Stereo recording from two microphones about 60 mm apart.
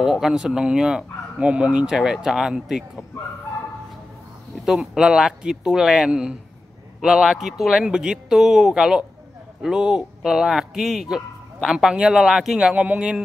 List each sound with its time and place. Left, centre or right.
0.0 s speech: centre
1.5 s speech: right; by 2.8 s centre
4.6 s a man's voice: centre
12.7 s speech: right